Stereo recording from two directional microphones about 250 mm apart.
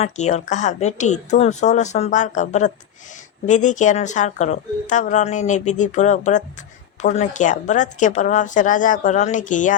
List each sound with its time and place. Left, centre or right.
0.0 s a woman's voice: left